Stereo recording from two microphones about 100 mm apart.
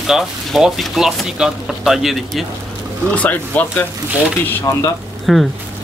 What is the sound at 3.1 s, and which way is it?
Speech, 15° left (ahead or behind).